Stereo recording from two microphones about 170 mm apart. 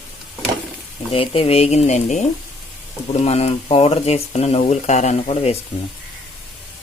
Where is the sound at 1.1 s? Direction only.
35° left (ahead or behind).